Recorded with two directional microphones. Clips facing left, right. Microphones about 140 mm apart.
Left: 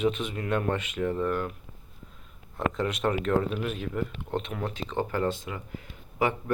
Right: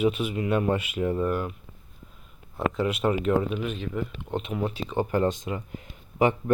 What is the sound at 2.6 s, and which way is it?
Speech, 5° right (ahead or behind).